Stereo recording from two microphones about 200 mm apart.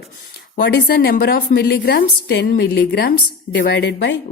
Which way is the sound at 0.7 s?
60° left (ahead or behind).